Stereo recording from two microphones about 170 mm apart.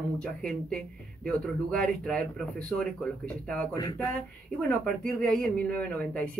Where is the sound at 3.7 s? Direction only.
20° left (ahead or behind).